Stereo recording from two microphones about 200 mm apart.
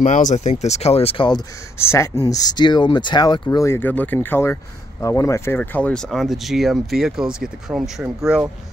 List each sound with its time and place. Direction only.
0.0 s speech: 40° left (ahead or behind)
1.8 s speech: 15° left (ahead or behind); by 8.5 s 5° right (ahead or behind)